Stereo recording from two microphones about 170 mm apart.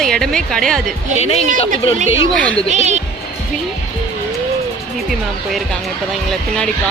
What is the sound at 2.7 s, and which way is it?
Speech, 45° right (ahead or behind).